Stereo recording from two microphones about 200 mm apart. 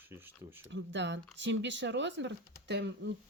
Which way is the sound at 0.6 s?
65° right (ahead or behind).